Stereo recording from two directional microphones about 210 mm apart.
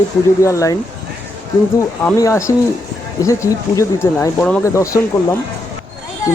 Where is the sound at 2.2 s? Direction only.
15° left (ahead or behind).